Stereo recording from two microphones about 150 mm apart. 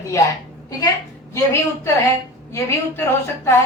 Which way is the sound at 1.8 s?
20° left (ahead or behind).